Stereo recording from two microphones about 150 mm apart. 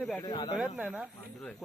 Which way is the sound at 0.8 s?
10° right (ahead or behind).